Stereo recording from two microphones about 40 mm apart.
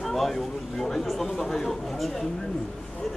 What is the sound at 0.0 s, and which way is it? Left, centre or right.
Speech, centre.